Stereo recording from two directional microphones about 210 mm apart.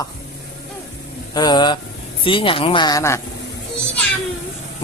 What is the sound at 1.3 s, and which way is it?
Speech, 20° left (ahead or behind).